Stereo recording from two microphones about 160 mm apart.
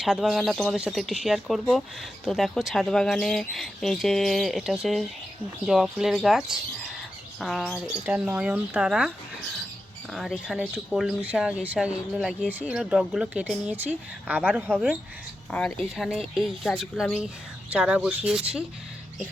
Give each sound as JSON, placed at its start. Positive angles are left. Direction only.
{"t": 0.0, "sound": "speech", "side_deg": -5}
{"t": 15.5, "sound": "speech", "side_deg": 5}